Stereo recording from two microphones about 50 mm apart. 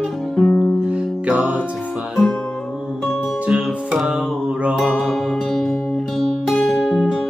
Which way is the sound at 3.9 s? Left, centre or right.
Centre.